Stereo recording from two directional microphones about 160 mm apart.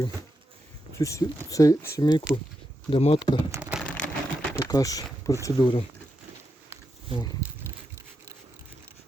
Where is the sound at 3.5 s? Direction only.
15° right (ahead or behind).